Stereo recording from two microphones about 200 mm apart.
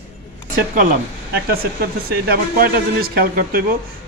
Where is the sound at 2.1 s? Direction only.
50° right (ahead or behind).